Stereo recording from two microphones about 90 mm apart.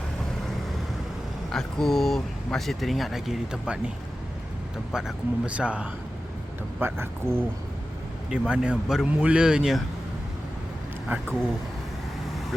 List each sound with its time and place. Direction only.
1.5 s speech: 5° left (ahead or behind)
4.9 s speech: 5° right (ahead or behind)
6.7 s speech: 25° right (ahead or behind)
8.3 s speech: 10° right (ahead or behind)
11.1 s speech: 20° right (ahead or behind)